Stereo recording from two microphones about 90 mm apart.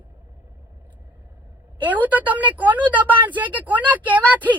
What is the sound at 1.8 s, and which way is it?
Speech, 20° right (ahead or behind).